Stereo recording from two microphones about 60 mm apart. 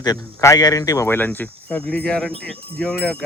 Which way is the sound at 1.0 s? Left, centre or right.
Left.